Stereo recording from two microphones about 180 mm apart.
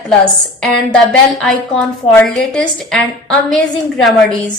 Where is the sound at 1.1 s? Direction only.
5° left (ahead or behind).